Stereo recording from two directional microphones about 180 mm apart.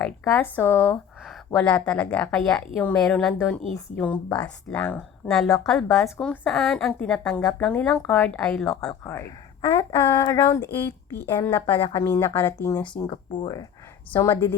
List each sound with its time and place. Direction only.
0.0 s a woman's voice: 10° left (ahead or behind)
8.9 s speech: 15° left (ahead or behind)
13.1 s speech: 25° left (ahead or behind)
14.1 s speech: 15° left (ahead or behind)